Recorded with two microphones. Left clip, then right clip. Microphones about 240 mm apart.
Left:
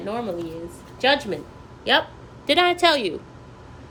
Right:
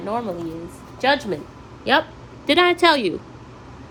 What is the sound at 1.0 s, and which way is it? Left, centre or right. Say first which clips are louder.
A woman's voice: right 1 dB; right.